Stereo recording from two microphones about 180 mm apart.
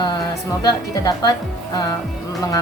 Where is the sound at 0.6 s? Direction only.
20° left (ahead or behind).